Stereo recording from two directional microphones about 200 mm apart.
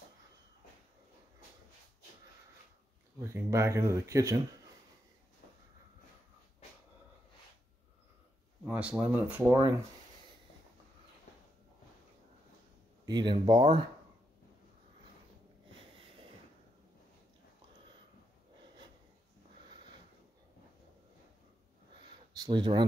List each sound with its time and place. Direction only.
3.2 s speech: 15° right (ahead or behind)
8.6 s speech: 5° right (ahead or behind)
13.0 s speech: 20° right (ahead or behind)
22.3 s speech: 20° right (ahead or behind)